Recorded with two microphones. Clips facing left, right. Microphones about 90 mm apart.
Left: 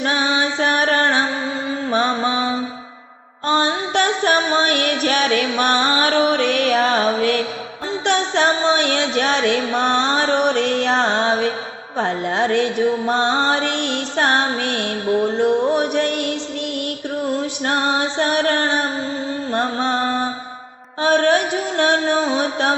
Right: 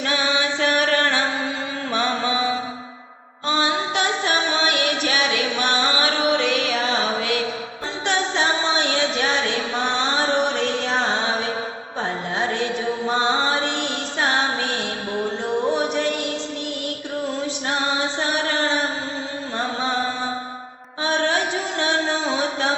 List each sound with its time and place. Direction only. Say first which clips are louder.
0.0 s music: left 3 dB; 35° left (ahead or behind)
1.9 s mantra: left 3 dB; 40° left (ahead or behind)
3.4 s music: left 3 dB; 45° left (ahead or behind)
8.0 s music: left 4 dB; 60° left (ahead or behind)
17.7 s music: left 4 dB; 55° left (ahead or behind)
19.5 s mantra: left 4 dB; 55° left (ahead or behind)
21.0 s music: left 6 dB; 55° left (ahead or behind)